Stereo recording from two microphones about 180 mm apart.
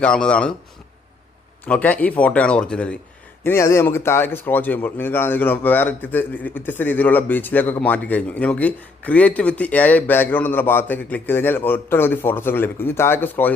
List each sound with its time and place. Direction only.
0.0 s a man's voice: 5° left (ahead or behind)
1.6 s a man's voice: 10° left (ahead or behind)